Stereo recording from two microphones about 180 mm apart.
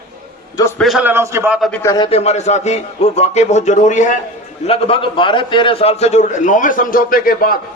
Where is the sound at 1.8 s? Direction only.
20° left (ahead or behind).